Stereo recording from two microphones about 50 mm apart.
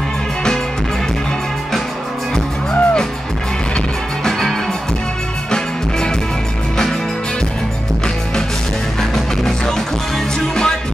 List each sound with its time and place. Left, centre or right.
2.7 s music: centre
9.1 s music: centre